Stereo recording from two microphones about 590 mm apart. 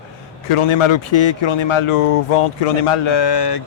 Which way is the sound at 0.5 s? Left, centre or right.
Left.